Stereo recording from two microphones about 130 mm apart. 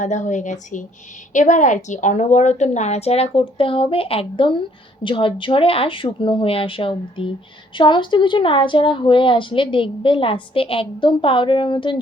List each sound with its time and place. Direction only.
0.0 s a woman's voice: 70° left (ahead or behind); by 11.9 s 40° left (ahead or behind)